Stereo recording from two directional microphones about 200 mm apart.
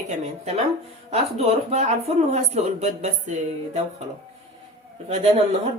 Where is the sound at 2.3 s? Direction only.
35° right (ahead or behind).